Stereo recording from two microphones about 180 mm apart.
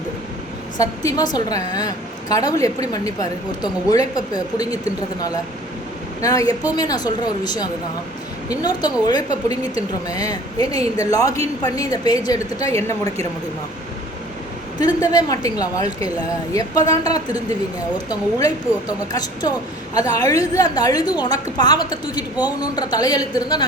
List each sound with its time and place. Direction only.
0.8 s speech: 20° left (ahead or behind)
6.2 s a woman's voice: 20° left (ahead or behind)
14.8 s speech: 20° left (ahead or behind)